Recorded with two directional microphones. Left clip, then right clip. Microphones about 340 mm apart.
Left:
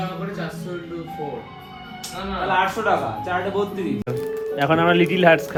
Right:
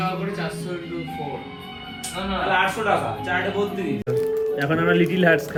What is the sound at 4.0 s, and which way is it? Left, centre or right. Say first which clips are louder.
Speech: right 4 dB; centre.